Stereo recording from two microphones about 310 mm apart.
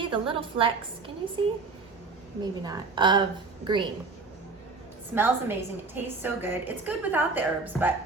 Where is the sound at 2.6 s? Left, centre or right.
Centre.